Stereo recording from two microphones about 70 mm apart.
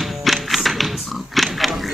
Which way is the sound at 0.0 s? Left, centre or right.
Centre.